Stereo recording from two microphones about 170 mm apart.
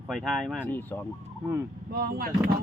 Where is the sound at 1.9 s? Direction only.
60° right (ahead or behind).